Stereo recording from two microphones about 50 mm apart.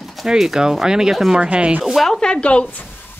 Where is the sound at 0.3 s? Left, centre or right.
Centre.